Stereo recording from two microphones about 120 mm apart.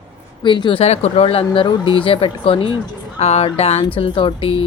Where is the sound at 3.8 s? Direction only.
45° left (ahead or behind).